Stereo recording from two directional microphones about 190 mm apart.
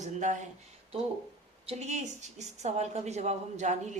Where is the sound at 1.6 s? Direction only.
35° right (ahead or behind).